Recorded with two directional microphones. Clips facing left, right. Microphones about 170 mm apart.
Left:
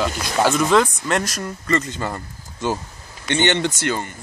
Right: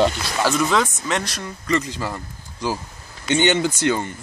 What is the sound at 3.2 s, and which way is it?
Speech, 10° right (ahead or behind).